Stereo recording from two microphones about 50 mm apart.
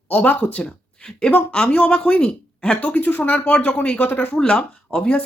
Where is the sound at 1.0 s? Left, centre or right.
Left.